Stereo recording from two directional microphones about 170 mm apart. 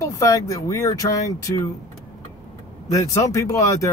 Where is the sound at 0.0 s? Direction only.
20° left (ahead or behind).